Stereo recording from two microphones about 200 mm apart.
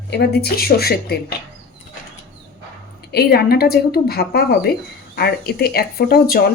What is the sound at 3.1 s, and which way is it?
Speech, 50° left (ahead or behind).